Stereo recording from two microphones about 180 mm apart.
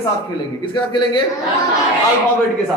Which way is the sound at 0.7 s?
25° left (ahead or behind).